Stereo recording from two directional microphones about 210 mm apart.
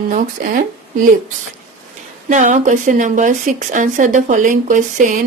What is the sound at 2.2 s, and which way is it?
A woman's voice, 35° right (ahead or behind).